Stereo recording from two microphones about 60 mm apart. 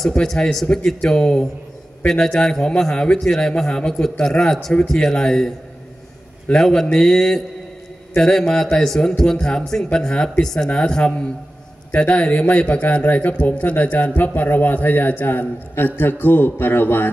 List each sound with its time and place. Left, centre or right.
0.1 s a man's voice: centre
6.6 s a man's voice: centre
11.9 s a man's voice: left